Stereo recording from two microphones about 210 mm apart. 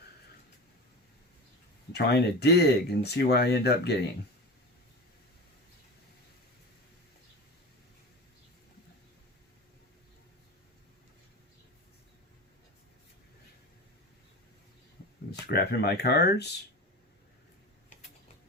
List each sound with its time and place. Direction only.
1.9 s speech: 50° left (ahead or behind)
15.3 s speech: 50° left (ahead or behind)